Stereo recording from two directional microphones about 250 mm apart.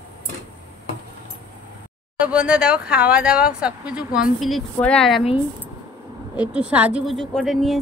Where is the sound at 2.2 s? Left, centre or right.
Centre.